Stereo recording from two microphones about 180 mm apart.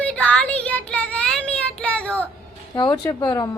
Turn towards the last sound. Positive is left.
turn(degrees=20)  # may be behind; listen again after turning